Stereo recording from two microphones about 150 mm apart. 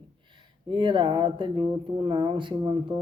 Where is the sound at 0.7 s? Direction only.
35° right (ahead or behind).